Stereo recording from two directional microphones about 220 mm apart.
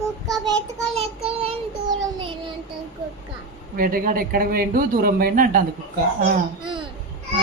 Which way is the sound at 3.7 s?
40° right (ahead or behind).